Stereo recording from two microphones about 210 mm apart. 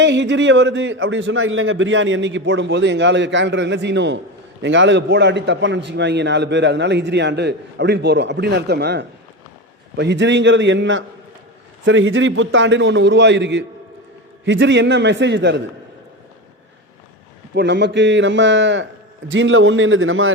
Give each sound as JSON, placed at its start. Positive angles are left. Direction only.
{"t": 0.0, "sound": "a man's voice", "side_deg": -60}
{"t": 17.5, "sound": "a man's voice", "side_deg": -55}